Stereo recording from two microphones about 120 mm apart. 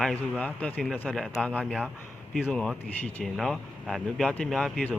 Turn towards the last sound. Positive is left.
turn(degrees=5)  # may be behind; listen again after turning